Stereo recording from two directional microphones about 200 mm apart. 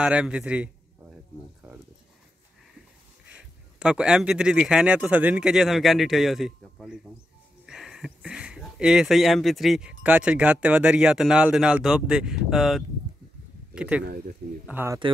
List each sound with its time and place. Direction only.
0.0 s a man's voice: 5° right (ahead or behind)
3.3 s speech: 5° right (ahead or behind)
14.0 s speech: 50° right (ahead or behind)
14.7 s speech: 10° right (ahead or behind)